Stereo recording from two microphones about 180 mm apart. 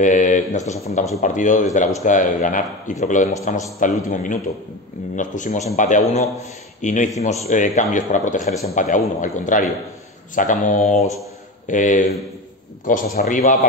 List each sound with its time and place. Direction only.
0.0 s speech: 45° left (ahead or behind)